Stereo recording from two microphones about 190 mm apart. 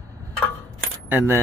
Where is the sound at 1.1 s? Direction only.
10° right (ahead or behind).